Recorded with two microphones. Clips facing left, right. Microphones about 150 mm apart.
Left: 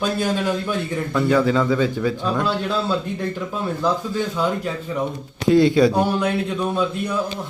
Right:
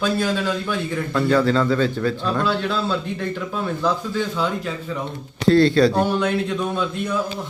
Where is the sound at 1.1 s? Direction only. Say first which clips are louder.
Even; 10° left (ahead or behind).